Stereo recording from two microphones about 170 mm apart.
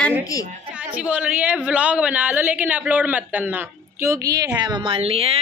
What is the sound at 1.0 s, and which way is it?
A woman's voice, 10° right (ahead or behind).